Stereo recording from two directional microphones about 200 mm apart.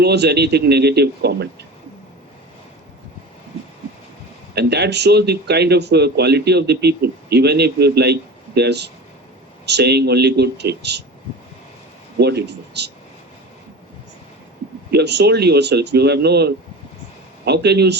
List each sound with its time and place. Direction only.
0.0 s speech: 55° right (ahead or behind)
4.5 s speech: 55° right (ahead or behind)
12.2 s speech: 55° right (ahead or behind)
14.8 s speech: 55° right (ahead or behind)